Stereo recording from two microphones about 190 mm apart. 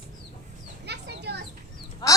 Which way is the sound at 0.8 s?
60° right (ahead or behind).